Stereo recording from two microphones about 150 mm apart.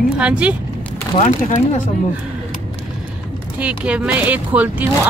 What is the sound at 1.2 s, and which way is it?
Speech, 55° left (ahead or behind).